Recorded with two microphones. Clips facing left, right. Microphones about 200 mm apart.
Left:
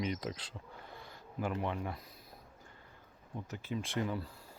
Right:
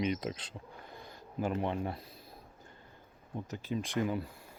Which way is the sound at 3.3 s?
15° right (ahead or behind).